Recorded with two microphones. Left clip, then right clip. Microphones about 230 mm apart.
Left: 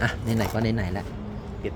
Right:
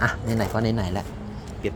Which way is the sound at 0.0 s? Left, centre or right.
Centre.